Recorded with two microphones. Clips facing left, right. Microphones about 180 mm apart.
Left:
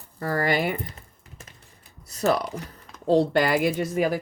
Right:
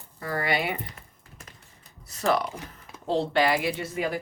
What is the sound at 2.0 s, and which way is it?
A woman's voice, 35° left (ahead or behind).